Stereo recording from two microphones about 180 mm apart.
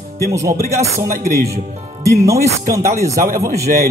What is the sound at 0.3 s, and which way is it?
Speech, 15° right (ahead or behind).